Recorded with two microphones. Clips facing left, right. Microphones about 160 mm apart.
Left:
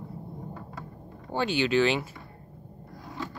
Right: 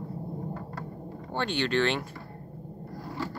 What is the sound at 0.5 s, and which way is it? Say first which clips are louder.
Vehicle: right 4 dB; centre (ahead or behind).